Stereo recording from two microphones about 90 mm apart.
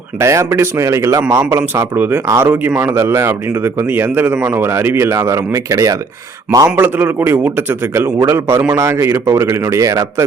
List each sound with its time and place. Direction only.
0.2 s a man's voice: 35° right (ahead or behind)
6.7 s a man's voice: 20° right (ahead or behind); by 10.2 s 40° right (ahead or behind)